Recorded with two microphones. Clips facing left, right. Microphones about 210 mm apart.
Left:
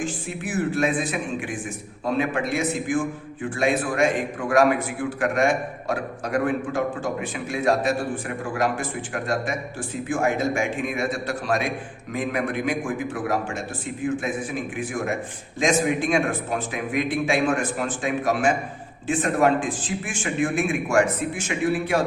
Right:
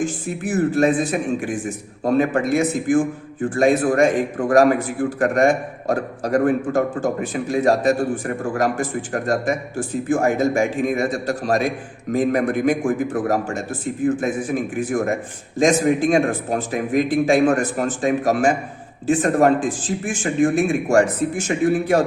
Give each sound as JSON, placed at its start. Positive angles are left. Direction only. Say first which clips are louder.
{"t": 0.0, "sound": "a man's voice", "louder": "right 5 dB", "side_deg": -40}